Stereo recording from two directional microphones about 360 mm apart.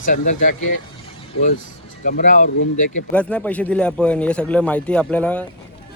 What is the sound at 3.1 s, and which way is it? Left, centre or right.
A man's voice, centre.